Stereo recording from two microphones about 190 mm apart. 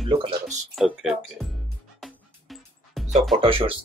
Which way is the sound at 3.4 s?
30° right (ahead or behind).